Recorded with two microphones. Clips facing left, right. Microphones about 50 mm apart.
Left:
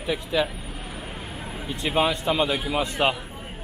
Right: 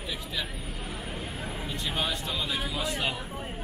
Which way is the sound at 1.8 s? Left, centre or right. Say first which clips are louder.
Left 10 dB; left.